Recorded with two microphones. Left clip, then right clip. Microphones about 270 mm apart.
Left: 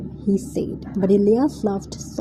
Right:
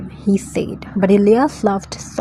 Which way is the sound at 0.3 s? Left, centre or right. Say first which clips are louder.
Right 4 dB; right.